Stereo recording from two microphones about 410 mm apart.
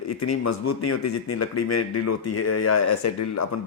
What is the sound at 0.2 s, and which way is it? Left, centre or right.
Speech, left.